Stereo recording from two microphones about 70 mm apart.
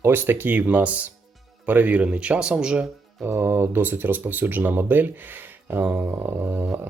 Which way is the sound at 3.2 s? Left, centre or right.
Right.